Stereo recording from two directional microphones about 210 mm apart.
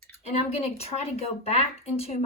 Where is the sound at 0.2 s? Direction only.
30° left (ahead or behind).